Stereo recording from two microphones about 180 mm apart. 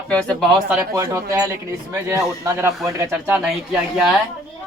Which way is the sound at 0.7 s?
15° right (ahead or behind).